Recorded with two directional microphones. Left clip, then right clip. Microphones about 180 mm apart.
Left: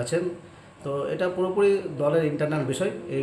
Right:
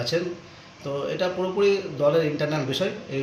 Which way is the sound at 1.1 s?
5° left (ahead or behind).